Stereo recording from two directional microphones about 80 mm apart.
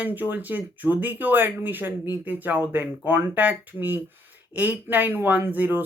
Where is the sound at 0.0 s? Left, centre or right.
Right.